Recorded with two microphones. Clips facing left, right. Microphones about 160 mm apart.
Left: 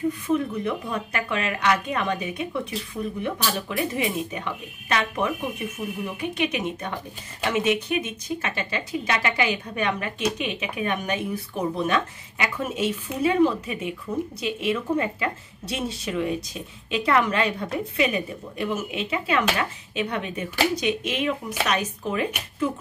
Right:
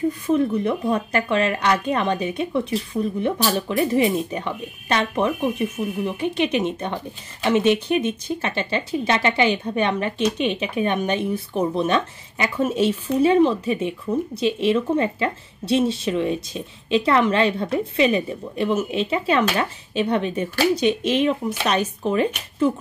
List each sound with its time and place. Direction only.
0.7 s speech: 35° right (ahead or behind)